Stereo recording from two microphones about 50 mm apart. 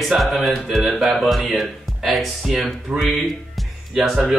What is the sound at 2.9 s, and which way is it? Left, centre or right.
Speech, centre.